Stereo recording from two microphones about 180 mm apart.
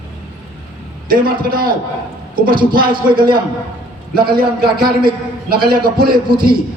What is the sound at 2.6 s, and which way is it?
Speech, 25° right (ahead or behind).